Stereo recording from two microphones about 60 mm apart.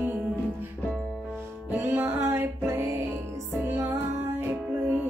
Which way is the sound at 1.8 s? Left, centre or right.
Right.